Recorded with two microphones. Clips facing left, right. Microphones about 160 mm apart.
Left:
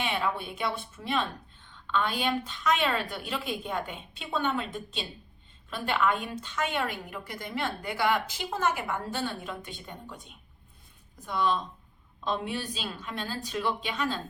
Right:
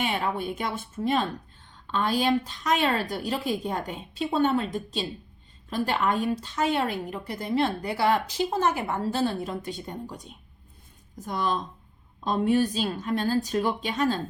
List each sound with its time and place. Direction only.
0.0 s a woman's voice: 45° right (ahead or behind)